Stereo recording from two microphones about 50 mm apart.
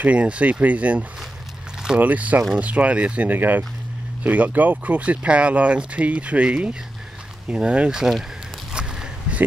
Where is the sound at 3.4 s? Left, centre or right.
Right.